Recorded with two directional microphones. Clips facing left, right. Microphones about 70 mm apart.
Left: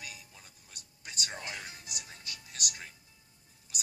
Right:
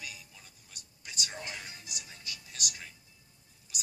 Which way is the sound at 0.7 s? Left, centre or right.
Left.